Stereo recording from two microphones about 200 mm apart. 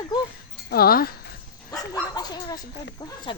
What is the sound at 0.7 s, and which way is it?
Speech, 50° left (ahead or behind).